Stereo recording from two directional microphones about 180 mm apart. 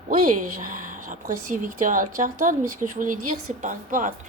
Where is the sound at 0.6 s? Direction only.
45° right (ahead or behind).